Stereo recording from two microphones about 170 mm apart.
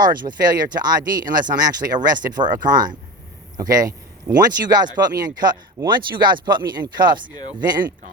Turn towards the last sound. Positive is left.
turn(degrees=-25)  # may be behind; listen again after turning